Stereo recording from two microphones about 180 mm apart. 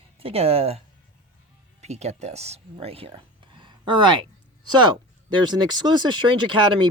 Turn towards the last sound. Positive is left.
turn(degrees=-25)  # may be behind; listen again after turning